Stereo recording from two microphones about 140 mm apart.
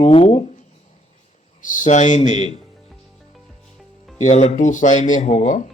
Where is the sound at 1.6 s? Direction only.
65° left (ahead or behind).